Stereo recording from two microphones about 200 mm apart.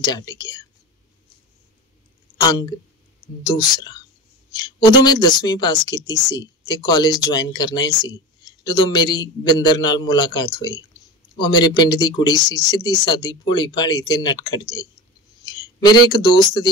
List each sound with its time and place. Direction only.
0.0 s speech: 20° left (ahead or behind)
2.4 s speech: 20° left (ahead or behind)